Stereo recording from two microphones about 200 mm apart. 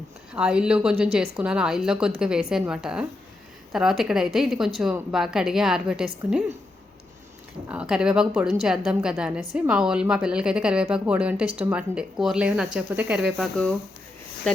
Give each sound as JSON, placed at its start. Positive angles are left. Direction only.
{"t": 0.3, "sound": "a woman's voice", "side_deg": -5}
{"t": 0.9, "sound": "a woman's voice", "side_deg": -50}
{"t": 1.4, "sound": "a woman's voice", "side_deg": -5}
{"t": 7.7, "sound": "a woman's voice", "side_deg": -5}